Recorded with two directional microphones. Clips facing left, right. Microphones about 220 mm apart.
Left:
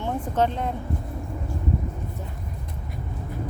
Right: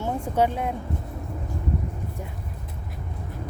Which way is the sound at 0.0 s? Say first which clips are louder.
Right 1 dB; 10° right (ahead or behind).